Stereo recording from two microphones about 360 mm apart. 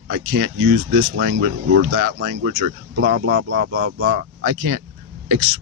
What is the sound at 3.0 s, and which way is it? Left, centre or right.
Speech, right.